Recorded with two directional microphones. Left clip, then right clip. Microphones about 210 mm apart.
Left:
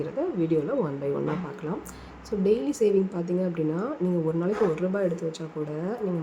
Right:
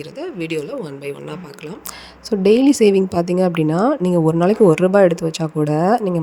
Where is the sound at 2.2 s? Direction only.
50° right (ahead or behind).